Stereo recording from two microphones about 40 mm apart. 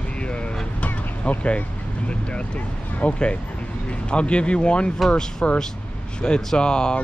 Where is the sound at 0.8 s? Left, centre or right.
Left.